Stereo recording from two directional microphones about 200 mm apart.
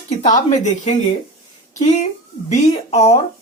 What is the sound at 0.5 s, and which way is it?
Speech, 35° left (ahead or behind).